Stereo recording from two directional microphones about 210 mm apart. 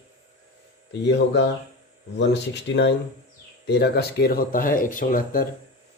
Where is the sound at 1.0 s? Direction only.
60° left (ahead or behind).